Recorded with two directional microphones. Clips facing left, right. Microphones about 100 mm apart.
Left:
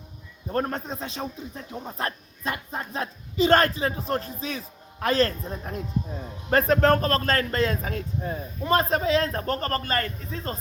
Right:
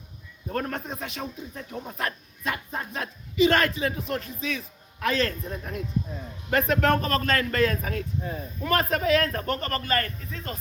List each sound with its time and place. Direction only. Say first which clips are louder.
0.5 s speech: left 3 dB; 35° left (ahead or behind)